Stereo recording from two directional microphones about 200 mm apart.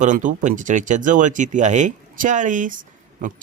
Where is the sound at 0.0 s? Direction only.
40° right (ahead or behind).